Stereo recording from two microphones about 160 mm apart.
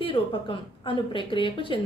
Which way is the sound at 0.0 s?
30° left (ahead or behind).